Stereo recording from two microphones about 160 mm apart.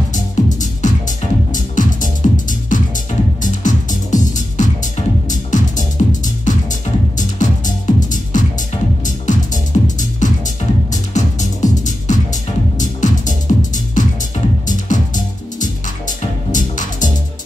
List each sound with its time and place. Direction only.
0.1 s music: 50° left (ahead or behind)